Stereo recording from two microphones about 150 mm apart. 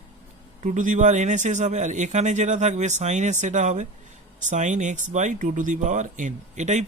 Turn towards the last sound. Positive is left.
turn(degrees=-50)  # may be behind; listen again after turning